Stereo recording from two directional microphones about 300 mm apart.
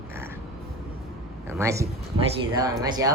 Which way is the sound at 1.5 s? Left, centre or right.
Centre.